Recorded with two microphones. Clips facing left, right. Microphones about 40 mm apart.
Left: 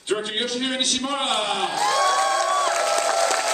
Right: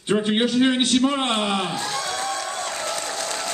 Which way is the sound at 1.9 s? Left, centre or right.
Left.